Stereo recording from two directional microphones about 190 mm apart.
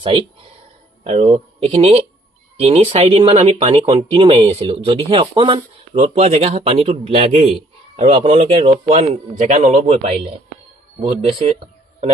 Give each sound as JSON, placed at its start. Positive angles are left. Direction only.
{"t": 0.0, "sound": "speech", "side_deg": -30}